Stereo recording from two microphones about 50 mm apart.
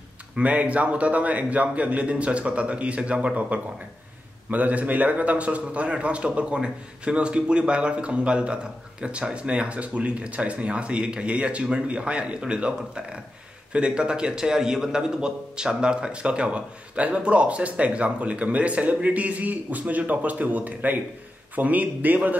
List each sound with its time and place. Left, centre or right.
0.4 s a man's voice: right